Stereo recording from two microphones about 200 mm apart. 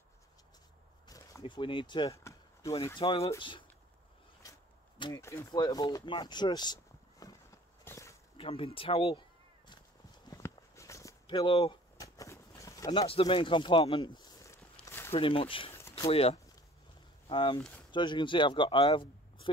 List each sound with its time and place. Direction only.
1.0 s chop: 15° left (ahead or behind)
3.0 s speech: 25° left (ahead or behind)
4.4 s walk: 20° left (ahead or behind)
5.1 s speech: 15° left (ahead or behind)
7.8 s a sound: 15° left (ahead or behind)
8.4 s speech: 25° left (ahead or behind)
10.3 s a sound: 15° left (ahead or behind)
13.0 s a sound: 30° left (ahead or behind); by 15.0 s 10° left (ahead or behind)
15.0 s speech: 25° left (ahead or behind)
17.6 s speech: 10° left (ahead or behind)
17.9 s speech: 25° left (ahead or behind)